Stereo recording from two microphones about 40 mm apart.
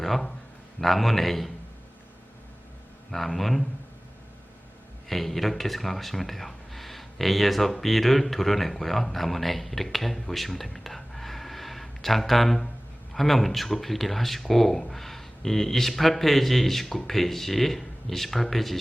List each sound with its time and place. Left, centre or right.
0.0 s a man's voice: centre
3.1 s speech: centre
5.0 s speech: centre